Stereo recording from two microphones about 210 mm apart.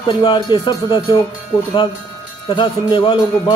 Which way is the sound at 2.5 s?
20° left (ahead or behind).